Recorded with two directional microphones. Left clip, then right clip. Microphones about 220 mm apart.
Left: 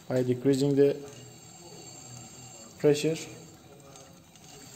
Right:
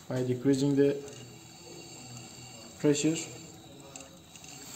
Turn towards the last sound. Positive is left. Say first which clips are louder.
# left 3 dB
turn(degrees=30)  # may be behind; listen again after turning